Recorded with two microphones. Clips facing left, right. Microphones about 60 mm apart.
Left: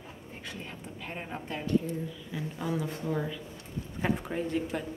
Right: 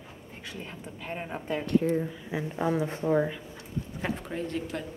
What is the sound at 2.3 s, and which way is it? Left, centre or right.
A woman's voice, right.